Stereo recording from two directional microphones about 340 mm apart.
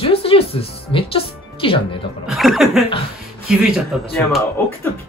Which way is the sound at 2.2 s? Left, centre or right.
Centre.